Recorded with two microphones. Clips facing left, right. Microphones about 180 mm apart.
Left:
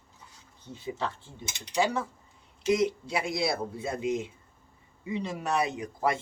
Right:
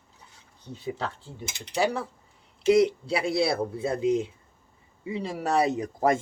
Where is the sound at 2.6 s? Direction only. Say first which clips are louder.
Right 6 dB; 30° right (ahead or behind).